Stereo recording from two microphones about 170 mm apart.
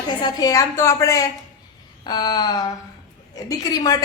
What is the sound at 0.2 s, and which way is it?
Speech, 25° left (ahead or behind).